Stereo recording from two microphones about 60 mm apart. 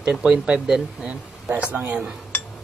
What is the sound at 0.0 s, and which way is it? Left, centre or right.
Speech, centre.